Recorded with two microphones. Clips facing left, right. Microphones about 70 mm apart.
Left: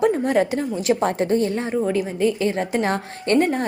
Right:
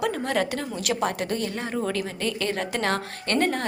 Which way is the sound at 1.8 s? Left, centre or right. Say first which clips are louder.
Left 9 dB; centre.